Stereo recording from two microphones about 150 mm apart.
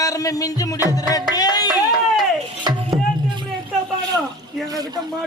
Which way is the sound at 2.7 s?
25° right (ahead or behind).